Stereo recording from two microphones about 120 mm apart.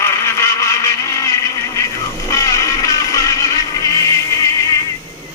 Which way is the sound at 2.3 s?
25° left (ahead or behind).